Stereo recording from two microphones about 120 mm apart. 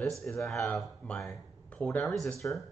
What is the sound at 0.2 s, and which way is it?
Speech, centre (ahead or behind).